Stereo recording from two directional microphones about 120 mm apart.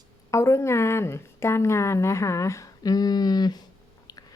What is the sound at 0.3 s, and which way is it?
A woman's voice, 25° left (ahead or behind).